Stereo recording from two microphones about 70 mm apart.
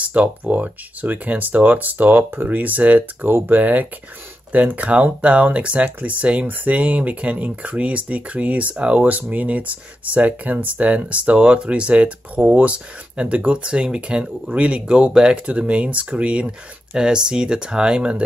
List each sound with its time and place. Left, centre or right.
0.0 s speech: right